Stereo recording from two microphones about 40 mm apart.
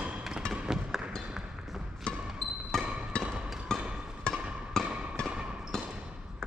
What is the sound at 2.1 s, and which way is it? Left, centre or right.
Basketball bounce, left.